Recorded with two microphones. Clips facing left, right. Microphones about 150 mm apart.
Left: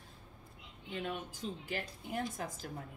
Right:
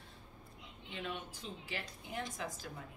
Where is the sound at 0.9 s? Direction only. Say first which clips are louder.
Left 3 dB; 40° left (ahead or behind).